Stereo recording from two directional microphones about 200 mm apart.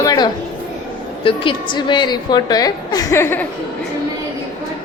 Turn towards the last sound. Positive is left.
turn(degrees=10)  # may be behind; listen again after turning